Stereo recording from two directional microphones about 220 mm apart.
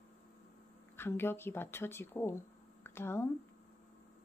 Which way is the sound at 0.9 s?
10° left (ahead or behind).